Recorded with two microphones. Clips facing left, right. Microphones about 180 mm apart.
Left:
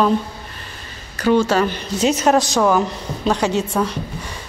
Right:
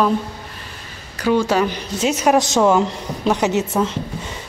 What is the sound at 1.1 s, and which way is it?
Speech, 10° right (ahead or behind).